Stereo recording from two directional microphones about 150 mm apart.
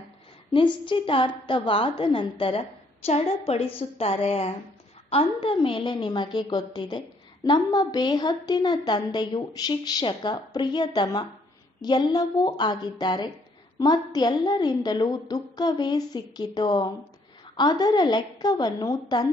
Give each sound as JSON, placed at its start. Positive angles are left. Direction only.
{"t": 0.5, "sound": "a woman's voice", "side_deg": 35}